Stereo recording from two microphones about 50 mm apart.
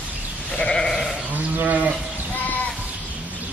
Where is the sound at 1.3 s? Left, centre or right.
Right.